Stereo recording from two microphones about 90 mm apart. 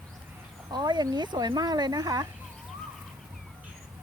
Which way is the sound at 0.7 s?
55° right (ahead or behind).